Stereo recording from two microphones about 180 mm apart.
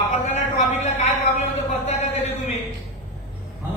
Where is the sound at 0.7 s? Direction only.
40° left (ahead or behind).